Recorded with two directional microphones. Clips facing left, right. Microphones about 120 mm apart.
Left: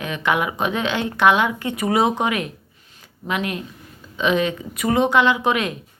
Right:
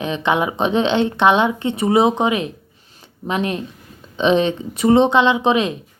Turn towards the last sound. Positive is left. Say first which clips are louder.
# right 3 dB
turn(degrees=-20)  # may be behind; listen again after turning